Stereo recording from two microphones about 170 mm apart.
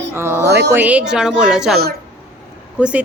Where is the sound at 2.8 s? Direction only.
5° right (ahead or behind).